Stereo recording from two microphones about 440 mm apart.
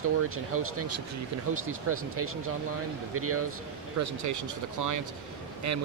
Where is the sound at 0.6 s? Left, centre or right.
Right.